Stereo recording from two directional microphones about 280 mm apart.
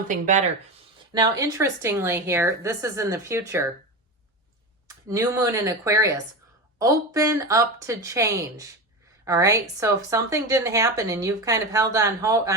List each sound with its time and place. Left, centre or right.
0.1 s speech: right
1.1 s a woman's voice: centre
4.9 s a woman's voice: centre